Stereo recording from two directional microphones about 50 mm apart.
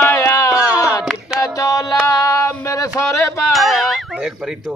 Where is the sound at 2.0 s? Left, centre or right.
Left.